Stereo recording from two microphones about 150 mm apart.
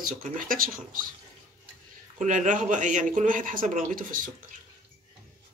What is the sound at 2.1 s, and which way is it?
Speech, 55° right (ahead or behind).